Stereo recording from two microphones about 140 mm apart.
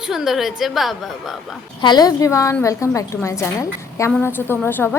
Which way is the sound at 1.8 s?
30° left (ahead or behind).